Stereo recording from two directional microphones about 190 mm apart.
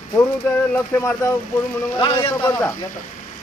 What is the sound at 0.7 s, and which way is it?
Speech, 15° left (ahead or behind).